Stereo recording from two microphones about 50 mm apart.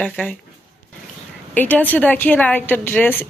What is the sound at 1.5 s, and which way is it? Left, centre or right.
A woman's voice, left.